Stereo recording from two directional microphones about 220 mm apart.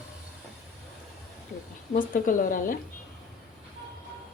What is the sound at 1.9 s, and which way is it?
Speech, 40° left (ahead or behind).